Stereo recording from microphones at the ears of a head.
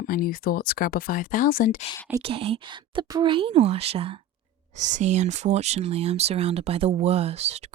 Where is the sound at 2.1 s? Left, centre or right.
Right.